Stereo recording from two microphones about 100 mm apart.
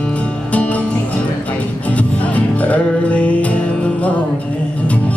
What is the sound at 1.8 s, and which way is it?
Music, 15° left (ahead or behind).